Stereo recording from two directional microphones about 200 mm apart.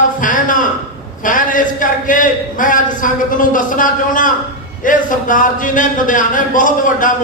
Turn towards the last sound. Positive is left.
turn(degrees=40)  # may be behind; listen again after turning